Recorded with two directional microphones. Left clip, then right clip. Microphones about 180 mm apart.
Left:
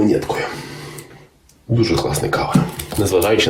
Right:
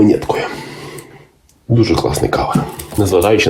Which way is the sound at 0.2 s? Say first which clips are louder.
Right 3 dB; 30° right (ahead or behind).